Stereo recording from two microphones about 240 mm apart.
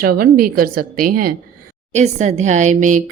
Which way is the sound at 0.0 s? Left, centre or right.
Right.